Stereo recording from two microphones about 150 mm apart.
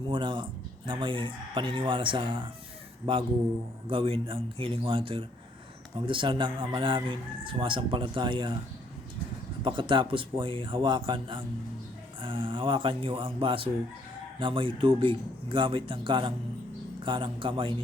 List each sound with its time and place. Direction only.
0.1 s speech: 35° right (ahead or behind)
9.6 s speech: 35° right (ahead or behind)